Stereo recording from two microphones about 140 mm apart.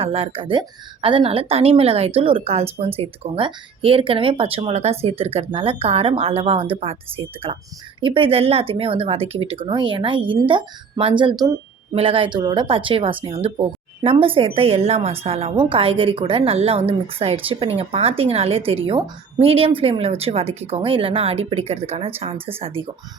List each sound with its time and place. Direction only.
0.0 s a woman's voice: 40° right (ahead or behind)
11.9 s a woman's voice: 45° right (ahead or behind)